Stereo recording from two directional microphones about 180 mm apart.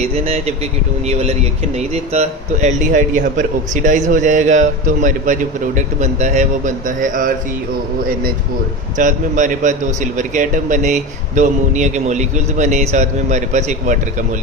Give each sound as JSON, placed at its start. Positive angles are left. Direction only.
{"t": 0.0, "sound": "speech", "side_deg": -35}
{"t": 9.0, "sound": "speech", "side_deg": -45}